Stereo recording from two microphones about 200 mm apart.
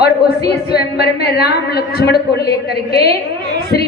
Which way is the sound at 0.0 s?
50° left (ahead or behind).